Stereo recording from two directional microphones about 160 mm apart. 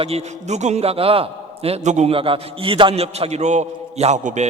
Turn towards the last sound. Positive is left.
turn(degrees=-45)  # may be behind; listen again after turning